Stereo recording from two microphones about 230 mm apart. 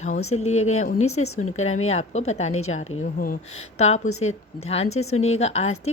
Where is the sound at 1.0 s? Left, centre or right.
Left.